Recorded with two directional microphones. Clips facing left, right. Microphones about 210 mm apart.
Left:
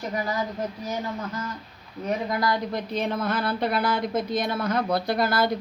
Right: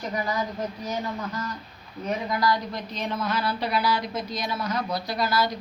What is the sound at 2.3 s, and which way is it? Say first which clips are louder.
Speech: even; 55° left (ahead or behind).